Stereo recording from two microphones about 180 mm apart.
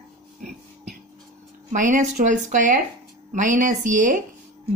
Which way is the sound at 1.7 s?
45° right (ahead or behind).